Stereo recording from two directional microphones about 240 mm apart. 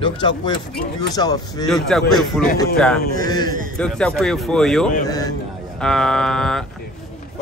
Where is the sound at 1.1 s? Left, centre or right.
Centre.